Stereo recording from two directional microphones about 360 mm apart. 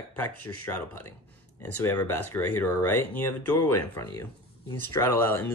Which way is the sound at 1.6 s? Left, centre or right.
Centre.